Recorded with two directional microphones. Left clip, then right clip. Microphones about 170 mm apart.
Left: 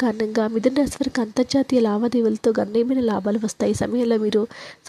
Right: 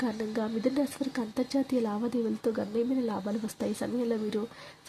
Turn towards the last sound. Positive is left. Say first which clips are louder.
# left 13 dB
turn(degrees=40)  # may be behind; listen again after turning